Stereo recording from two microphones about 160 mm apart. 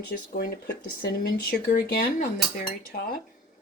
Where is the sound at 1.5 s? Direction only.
75° left (ahead or behind).